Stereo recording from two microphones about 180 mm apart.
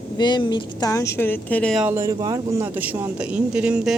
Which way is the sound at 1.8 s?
15° right (ahead or behind).